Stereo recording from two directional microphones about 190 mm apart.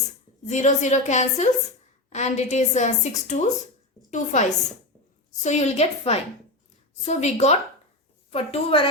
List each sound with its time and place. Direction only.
0.4 s a woman's voice: 40° left (ahead or behind)